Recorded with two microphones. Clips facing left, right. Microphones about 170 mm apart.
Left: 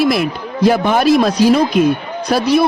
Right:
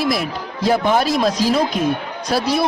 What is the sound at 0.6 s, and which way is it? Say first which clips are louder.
A woman's voice: left 4 dB; 75° left (ahead or behind).